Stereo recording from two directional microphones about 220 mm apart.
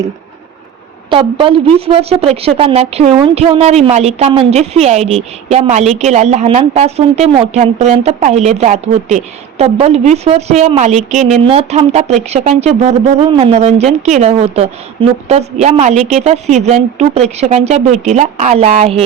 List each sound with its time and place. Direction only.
1.1 s a woman's voice: 25° right (ahead or behind)